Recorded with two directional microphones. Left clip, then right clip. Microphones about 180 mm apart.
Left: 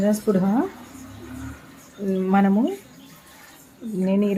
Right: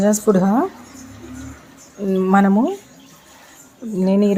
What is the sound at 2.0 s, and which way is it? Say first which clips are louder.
Speech: right 5 dB; 15° right (ahead or behind).